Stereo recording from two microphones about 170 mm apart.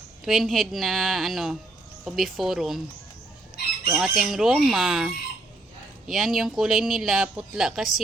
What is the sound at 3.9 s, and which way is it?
Speech, centre (ahead or behind).